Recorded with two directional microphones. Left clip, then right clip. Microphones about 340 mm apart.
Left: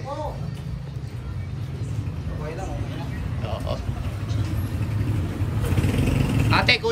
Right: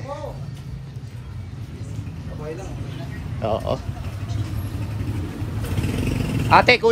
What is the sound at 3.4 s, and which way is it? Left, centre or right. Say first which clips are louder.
Speech: right 8 dB; centre.